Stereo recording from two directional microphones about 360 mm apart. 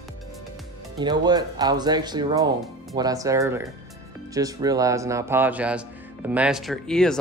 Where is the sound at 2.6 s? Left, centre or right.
Centre.